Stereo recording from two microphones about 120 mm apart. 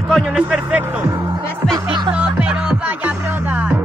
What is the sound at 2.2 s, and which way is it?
Music, 10° right (ahead or behind).